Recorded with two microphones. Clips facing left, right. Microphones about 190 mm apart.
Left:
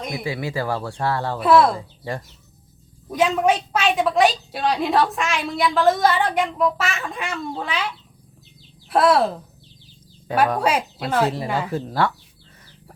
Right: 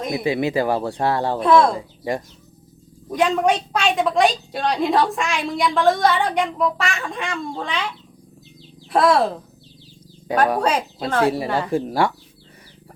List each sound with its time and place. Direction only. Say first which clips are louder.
0.1 s speech: right 8 dB; 25° right (ahead or behind)
1.4 s a woman's voice: even; 5° left (ahead or behind)
1.7 s speech: right 4 dB; 15° right (ahead or behind)
3.1 s a woman's voice: even; centre (ahead or behind)
10.6 s speech: right 1 dB; 10° left (ahead or behind)
11.7 s speech: right 4 dB; 15° right (ahead or behind)